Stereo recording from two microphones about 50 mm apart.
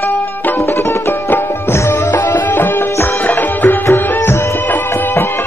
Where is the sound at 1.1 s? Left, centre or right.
Left.